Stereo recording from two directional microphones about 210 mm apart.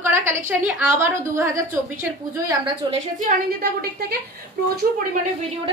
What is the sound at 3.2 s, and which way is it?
A woman's voice, 45° right (ahead or behind).